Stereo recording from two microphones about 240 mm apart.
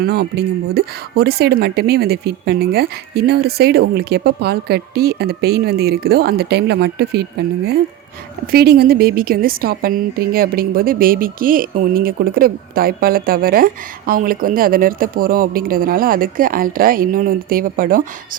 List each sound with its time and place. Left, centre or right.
0.0 s a woman's voice: right